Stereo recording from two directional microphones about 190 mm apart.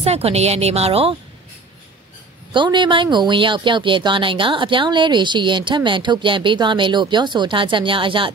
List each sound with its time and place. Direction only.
0.0 s a woman's voice: 35° right (ahead or behind)
2.5 s speech: 25° right (ahead or behind)